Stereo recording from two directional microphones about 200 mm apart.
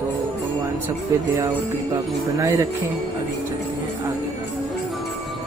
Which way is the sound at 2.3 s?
15° right (ahead or behind).